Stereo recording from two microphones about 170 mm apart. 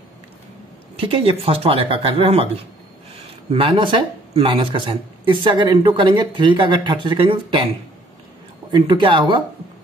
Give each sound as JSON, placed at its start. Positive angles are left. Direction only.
{"t": 0.9, "sound": "speech", "side_deg": -35}
{"t": 3.5, "sound": "speech", "side_deg": -30}
{"t": 8.7, "sound": "speech", "side_deg": -30}